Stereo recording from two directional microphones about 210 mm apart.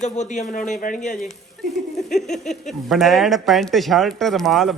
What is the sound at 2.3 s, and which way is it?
Speech, centre (ahead or behind).